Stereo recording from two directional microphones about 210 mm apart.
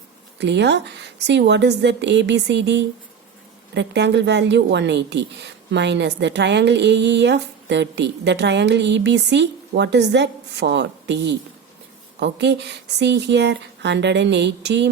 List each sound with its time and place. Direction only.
0.3 s a woman's voice: 55° right (ahead or behind)